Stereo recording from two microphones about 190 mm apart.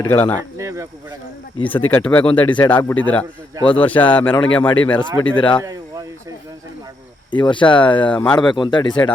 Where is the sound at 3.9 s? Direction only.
20° left (ahead or behind).